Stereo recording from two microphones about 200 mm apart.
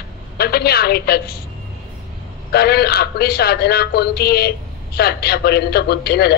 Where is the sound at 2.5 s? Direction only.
55° left (ahead or behind).